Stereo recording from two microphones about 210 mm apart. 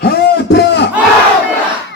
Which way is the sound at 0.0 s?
50° left (ahead or behind).